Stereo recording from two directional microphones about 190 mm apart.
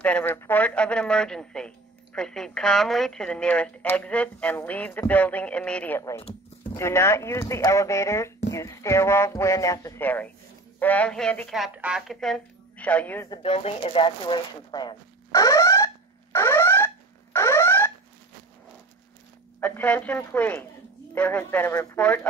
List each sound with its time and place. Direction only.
0.0 s a woman's voice: 10° left (ahead or behind)
13.3 s a sound: 30° left (ahead or behind); by 17.9 s 10° left (ahead or behind)
19.6 s a woman's voice: 10° left (ahead or behind)